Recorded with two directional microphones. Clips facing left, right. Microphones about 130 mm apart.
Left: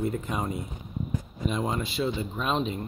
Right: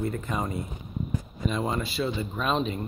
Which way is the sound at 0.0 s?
10° left (ahead or behind).